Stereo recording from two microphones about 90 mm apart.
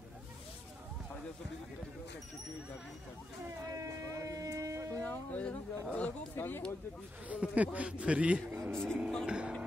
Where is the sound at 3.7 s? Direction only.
35° right (ahead or behind).